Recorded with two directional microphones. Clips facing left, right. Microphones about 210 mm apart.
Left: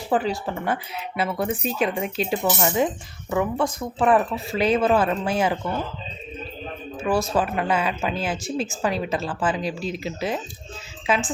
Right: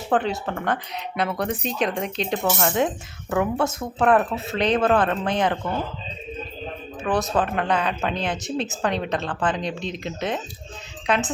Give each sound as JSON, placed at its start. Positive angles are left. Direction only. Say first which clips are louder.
{"t": 0.1, "sound": "speech", "louder": "even", "side_deg": 5}
{"t": 7.1, "sound": "speech", "louder": "left 1 dB", "side_deg": -20}
{"t": 7.3, "sound": "speech", "louder": "even", "side_deg": 5}